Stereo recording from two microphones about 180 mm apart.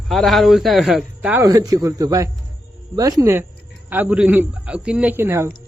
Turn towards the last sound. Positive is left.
turn(degrees=-15)  # may be behind; listen again after turning